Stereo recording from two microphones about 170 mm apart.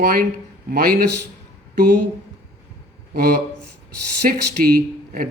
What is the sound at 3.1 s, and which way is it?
A man's voice, 70° right (ahead or behind).